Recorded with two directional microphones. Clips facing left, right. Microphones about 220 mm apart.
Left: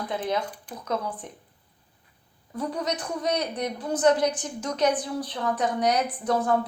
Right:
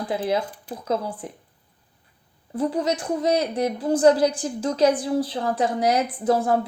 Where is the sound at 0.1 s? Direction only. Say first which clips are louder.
Right 5 dB; 30° right (ahead or behind).